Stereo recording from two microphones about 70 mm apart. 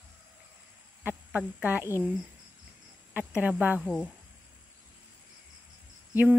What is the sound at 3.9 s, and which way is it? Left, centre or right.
Speech, centre.